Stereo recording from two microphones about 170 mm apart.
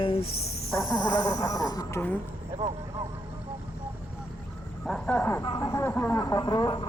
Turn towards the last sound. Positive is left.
turn(degrees=25)  # may be behind; listen again after turning